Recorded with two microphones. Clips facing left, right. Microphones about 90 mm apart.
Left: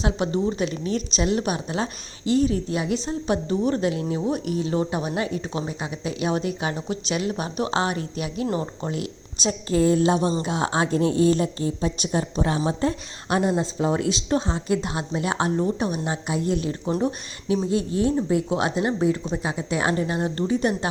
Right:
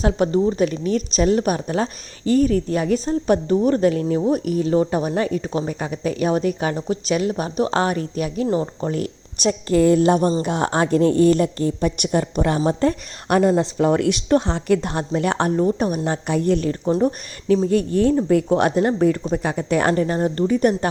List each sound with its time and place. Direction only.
0.0 s a woman's voice: 40° right (ahead or behind)
8.4 s speech: 25° right (ahead or behind)
8.9 s speech: 45° right (ahead or behind)
9.6 s a woman's voice: 60° right (ahead or behind); by 17.6 s 45° right (ahead or behind)
17.7 s a woman's voice: 60° right (ahead or behind)